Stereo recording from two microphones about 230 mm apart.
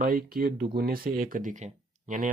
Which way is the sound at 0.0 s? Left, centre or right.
Right.